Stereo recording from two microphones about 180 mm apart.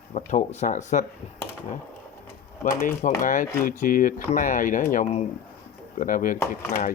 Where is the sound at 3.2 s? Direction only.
45° left (ahead or behind).